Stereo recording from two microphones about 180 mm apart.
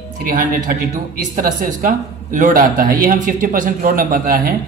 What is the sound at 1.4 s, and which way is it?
Speech, 50° right (ahead or behind).